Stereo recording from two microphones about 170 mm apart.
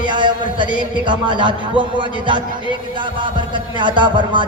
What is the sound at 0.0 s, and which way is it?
A man's voice, 25° right (ahead or behind).